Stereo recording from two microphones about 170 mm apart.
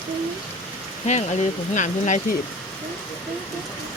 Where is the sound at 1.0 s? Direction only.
40° left (ahead or behind).